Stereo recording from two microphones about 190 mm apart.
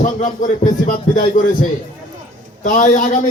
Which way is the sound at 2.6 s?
40° left (ahead or behind).